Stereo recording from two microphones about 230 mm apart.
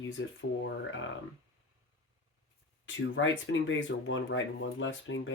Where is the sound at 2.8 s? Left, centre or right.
Left.